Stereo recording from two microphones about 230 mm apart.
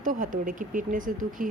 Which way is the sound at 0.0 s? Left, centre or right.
Right.